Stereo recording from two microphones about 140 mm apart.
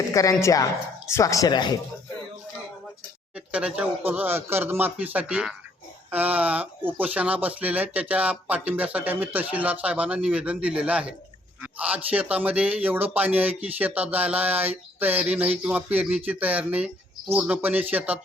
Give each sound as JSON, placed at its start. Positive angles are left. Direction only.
{"t": 0.1, "sound": "speech", "side_deg": 25}
{"t": 3.3, "sound": "speech", "side_deg": -10}